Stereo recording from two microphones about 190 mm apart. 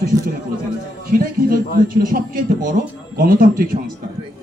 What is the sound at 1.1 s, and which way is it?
A man's voice, 50° right (ahead or behind).